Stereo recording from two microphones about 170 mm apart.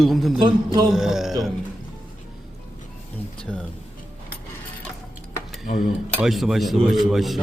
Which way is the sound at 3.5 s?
5° right (ahead or behind).